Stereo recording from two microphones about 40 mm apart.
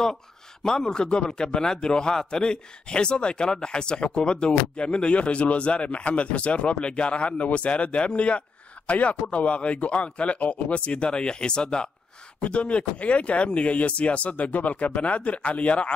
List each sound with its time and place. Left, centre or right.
0.7 s speech: centre
12.4 s speech: left